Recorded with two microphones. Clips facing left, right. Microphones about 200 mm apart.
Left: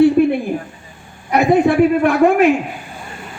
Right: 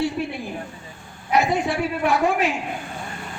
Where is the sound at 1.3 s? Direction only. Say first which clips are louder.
Left 8 dB; 60° left (ahead or behind).